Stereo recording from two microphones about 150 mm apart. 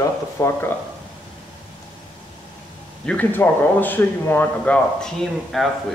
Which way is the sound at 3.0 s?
10° left (ahead or behind).